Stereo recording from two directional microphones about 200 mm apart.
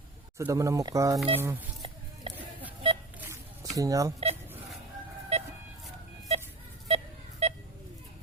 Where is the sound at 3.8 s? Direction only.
15° right (ahead or behind).